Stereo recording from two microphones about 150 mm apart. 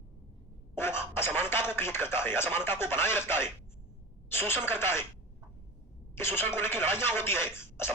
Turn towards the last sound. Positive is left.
turn(degrees=15)  # may be behind; listen again after turning